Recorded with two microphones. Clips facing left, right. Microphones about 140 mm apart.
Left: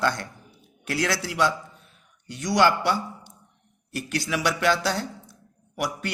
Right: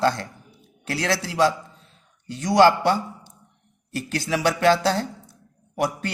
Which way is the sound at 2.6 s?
40° right (ahead or behind).